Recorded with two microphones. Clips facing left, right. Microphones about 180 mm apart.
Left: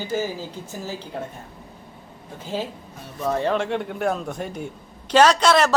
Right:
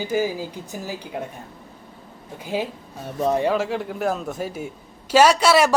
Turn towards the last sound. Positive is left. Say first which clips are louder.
# right 1 dB
turn(degrees=-10)  # may be behind; listen again after turning